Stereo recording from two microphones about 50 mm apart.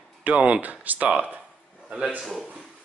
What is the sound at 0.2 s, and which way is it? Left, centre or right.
Speech, right.